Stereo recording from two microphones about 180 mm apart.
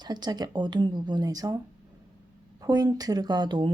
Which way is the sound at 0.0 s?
25° right (ahead or behind).